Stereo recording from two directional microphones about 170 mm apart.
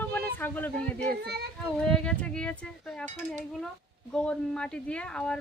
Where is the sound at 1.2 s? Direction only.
75° right (ahead or behind).